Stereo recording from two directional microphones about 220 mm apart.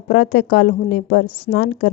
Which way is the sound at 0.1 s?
45° left (ahead or behind).